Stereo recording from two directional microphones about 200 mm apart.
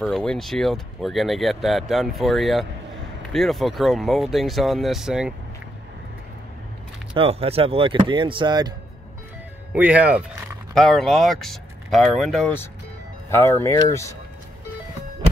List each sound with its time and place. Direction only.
0.0 s speech: 5° left (ahead or behind)
7.2 s speech: 30° right (ahead or behind)
9.7 s speech: 5° right (ahead or behind); by 14.1 s 15° left (ahead or behind)